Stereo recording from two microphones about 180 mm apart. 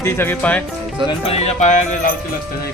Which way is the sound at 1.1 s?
35° left (ahead or behind).